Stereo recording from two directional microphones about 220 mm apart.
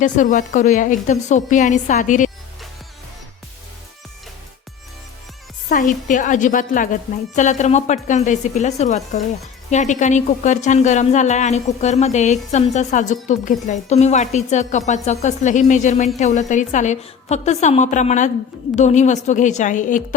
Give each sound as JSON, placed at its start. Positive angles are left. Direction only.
{"t": 0.0, "sound": "a woman's voice", "side_deg": 35}
{"t": 5.6, "sound": "a woman's voice", "side_deg": 35}